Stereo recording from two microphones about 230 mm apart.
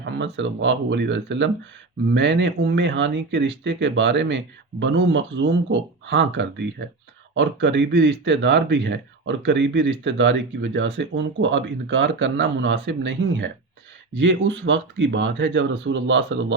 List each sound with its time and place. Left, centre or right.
0.0 s speech: right